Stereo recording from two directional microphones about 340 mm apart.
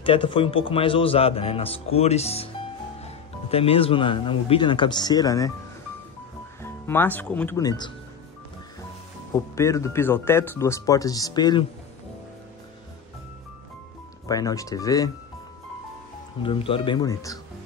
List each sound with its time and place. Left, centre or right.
0.0 s speech: centre
6.6 s speech: centre
9.3 s speech: centre
14.2 s speech: centre
16.4 s speech: centre